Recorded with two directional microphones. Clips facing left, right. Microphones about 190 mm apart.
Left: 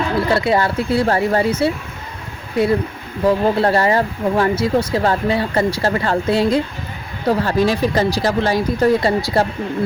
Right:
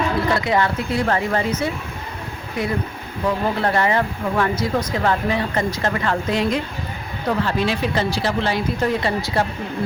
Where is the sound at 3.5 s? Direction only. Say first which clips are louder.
Left 4 dB; 30° left (ahead or behind).